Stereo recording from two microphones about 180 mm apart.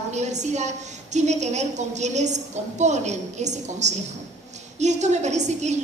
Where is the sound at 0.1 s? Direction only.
40° right (ahead or behind).